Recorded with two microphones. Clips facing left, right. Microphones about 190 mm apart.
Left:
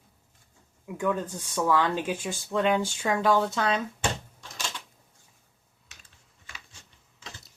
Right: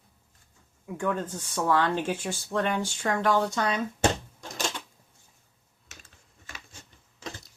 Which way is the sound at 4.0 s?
45° right (ahead or behind).